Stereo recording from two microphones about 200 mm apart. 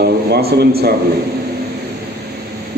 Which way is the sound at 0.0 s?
55° right (ahead or behind).